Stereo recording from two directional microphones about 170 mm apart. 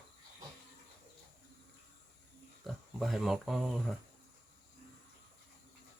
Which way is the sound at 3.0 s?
Centre (ahead or behind).